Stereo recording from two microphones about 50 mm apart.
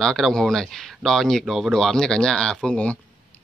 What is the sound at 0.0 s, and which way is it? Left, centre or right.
Speech, centre.